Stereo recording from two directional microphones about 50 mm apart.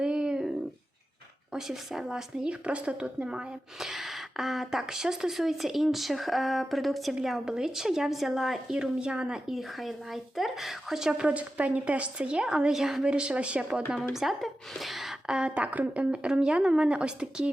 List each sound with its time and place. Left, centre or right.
0.0 s a sound: centre
1.5 s a woman's voice: centre
3.8 s speech: centre
7.3 s a woman's voice: centre
9.5 s speech: centre
11.3 s a woman's voice: right
14.0 s speech: centre
14.7 s gasp: centre
15.3 s a woman's voice: centre
15.5 s a woman's voice: right